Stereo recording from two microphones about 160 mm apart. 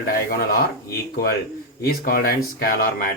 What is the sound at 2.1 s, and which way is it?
Speech, 70° left (ahead or behind).